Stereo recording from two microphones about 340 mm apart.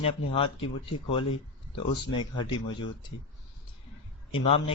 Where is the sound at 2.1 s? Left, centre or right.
Centre.